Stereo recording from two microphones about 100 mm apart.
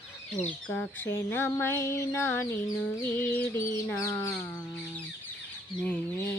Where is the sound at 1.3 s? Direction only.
20° left (ahead or behind).